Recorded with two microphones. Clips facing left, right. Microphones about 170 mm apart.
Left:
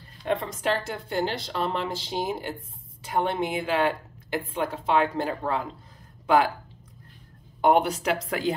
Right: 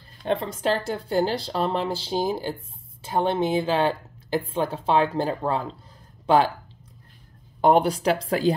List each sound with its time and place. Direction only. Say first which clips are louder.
0.2 s speech: right 2 dB; 30° right (ahead or behind)
7.6 s speech: right 3 dB; 35° right (ahead or behind)